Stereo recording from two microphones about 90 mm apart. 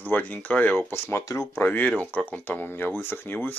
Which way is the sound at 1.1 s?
30° left (ahead or behind).